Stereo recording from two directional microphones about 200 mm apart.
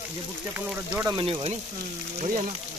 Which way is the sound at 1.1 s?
25° right (ahead or behind).